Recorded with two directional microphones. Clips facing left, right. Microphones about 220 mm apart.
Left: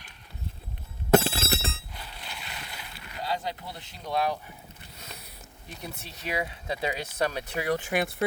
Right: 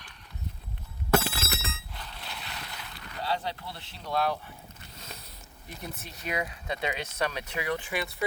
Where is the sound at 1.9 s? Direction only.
5° left (ahead or behind).